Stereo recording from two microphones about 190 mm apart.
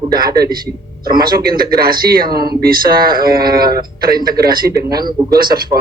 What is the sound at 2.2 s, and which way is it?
Speech, 20° right (ahead or behind).